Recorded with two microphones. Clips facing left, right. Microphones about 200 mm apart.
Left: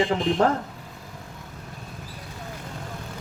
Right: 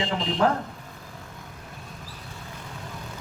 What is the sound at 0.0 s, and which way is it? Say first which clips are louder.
Speech: left 5 dB; 50° left (ahead or behind).